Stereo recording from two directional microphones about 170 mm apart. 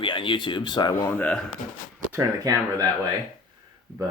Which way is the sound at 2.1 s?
15° right (ahead or behind).